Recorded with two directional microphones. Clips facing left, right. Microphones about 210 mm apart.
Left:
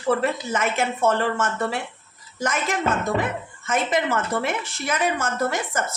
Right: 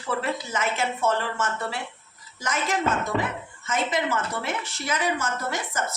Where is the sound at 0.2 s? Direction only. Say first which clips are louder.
Left 4 dB; 50° left (ahead or behind).